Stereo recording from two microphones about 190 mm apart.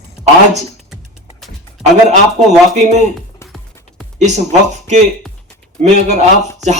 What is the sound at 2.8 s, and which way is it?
Speech, 35° right (ahead or behind).